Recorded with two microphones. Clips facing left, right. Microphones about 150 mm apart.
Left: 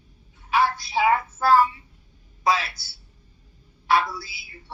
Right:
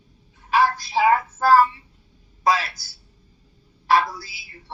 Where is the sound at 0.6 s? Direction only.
40° right (ahead or behind).